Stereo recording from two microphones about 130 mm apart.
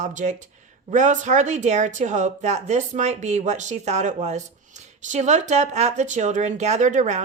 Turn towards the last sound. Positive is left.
turn(degrees=-65)  # may be behind; listen again after turning